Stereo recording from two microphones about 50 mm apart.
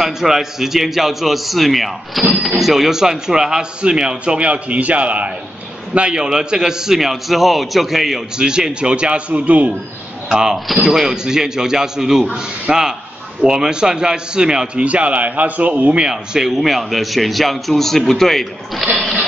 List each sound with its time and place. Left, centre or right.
0.0 s a man's voice: centre
8.4 s a man's voice: centre
10.3 s speech: centre
14.9 s a man's voice: right; by 18.9 s centre